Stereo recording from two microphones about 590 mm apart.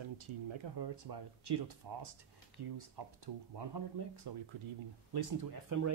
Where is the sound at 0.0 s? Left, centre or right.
Right.